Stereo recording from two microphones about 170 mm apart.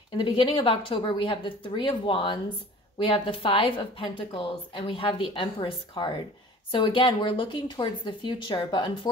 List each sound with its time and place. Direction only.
0.2 s a woman's voice: 30° left (ahead or behind)